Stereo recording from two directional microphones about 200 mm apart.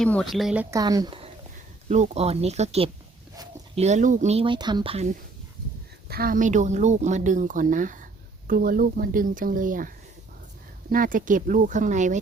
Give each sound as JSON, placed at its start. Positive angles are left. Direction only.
{"t": 0.0, "sound": "a woman's voice", "side_deg": 5}
{"t": 6.1, "sound": "speech", "side_deg": -50}
{"t": 10.9, "sound": "speech", "side_deg": -45}